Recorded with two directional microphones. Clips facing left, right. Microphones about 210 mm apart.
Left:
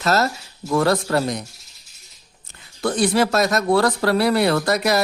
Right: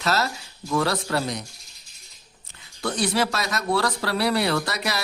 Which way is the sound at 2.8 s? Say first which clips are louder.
Left 5 dB; 50° left (ahead or behind).